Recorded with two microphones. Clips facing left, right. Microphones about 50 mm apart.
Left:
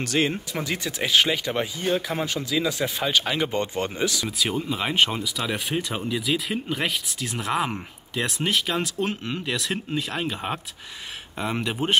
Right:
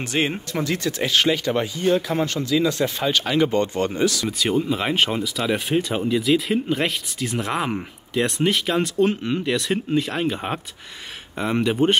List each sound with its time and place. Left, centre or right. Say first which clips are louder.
0.0 s speech: right 1 dB; right
0.7 s speech: right 2 dB; centre
4.3 s speech: right 5 dB; centre